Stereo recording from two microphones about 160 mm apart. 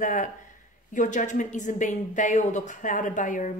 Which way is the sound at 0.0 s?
55° left (ahead or behind).